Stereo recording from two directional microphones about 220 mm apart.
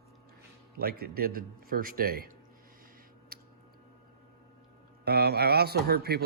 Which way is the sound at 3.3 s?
40° right (ahead or behind).